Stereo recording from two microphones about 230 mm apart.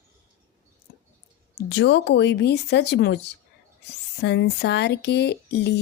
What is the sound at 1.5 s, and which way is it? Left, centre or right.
Speech, left.